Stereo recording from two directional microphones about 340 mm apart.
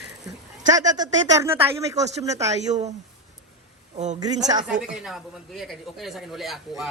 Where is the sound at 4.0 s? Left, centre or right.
Centre.